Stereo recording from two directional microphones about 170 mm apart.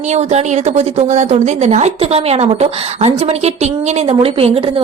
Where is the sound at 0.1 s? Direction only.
40° right (ahead or behind).